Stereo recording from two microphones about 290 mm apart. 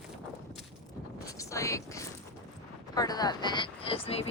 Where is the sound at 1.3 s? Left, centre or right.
Centre.